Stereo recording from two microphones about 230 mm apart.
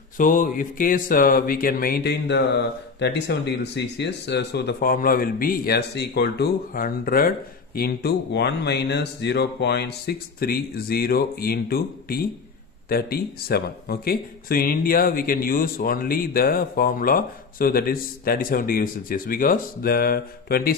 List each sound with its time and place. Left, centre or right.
0.2 s speech: left